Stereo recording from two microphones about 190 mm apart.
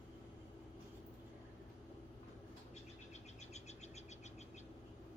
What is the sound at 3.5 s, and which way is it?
Bird, 35° left (ahead or behind).